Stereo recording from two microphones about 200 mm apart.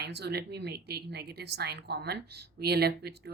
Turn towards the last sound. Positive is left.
turn(degrees=-55)  # may be behind; listen again after turning